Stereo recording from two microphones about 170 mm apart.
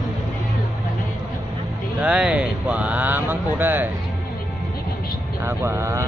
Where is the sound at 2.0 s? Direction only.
5° right (ahead or behind).